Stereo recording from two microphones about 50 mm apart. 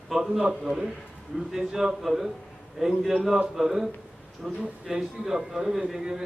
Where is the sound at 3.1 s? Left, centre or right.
Centre.